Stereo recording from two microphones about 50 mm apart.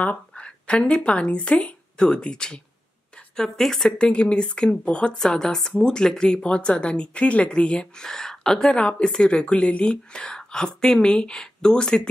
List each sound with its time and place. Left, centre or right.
0.3 s a woman's voice: left
4.0 s a woman's voice: left
8.0 s speech: centre
8.7 s a woman's voice: centre